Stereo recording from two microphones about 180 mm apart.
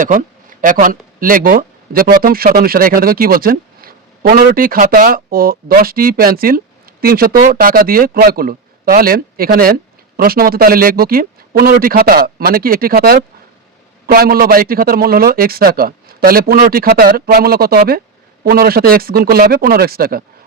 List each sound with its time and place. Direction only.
0.0 s a man's voice: 45° right (ahead or behind)